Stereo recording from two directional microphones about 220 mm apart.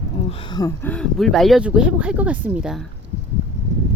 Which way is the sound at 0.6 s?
5° left (ahead or behind).